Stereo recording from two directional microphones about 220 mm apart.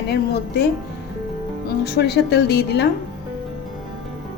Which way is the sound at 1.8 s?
50° left (ahead or behind).